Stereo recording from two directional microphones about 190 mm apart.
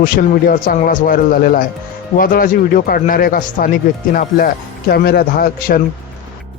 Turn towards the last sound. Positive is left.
turn(degrees=50)  # may be behind; listen again after turning